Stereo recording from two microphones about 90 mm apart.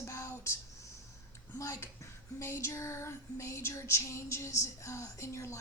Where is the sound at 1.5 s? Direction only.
35° left (ahead or behind).